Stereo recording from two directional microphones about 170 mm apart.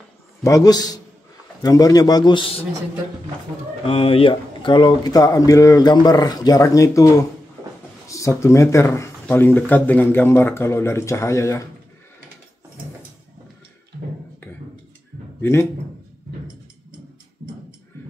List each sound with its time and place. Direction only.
0.4 s speech: 20° left (ahead or behind)
3.8 s speech: 30° left (ahead or behind); by 11.7 s 15° left (ahead or behind)
15.4 s speech: 15° left (ahead or behind)